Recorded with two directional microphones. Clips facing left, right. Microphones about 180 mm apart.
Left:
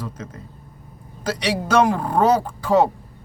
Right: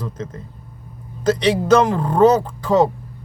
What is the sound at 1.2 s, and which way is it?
Speech, 10° left (ahead or behind).